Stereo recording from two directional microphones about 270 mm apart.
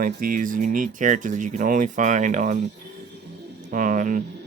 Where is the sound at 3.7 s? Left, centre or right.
Right.